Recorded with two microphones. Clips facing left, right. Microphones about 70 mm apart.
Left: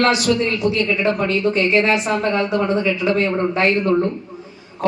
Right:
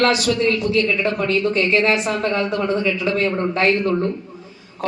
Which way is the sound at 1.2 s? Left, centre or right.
Centre.